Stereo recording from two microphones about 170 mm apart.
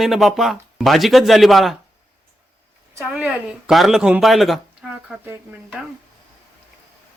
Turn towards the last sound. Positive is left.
turn(degrees=-5)  # may be behind; listen again after turning